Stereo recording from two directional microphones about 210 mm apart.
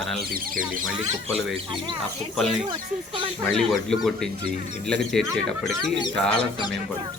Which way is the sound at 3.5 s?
Centre (ahead or behind).